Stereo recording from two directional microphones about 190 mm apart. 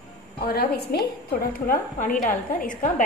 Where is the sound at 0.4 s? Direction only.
55° left (ahead or behind).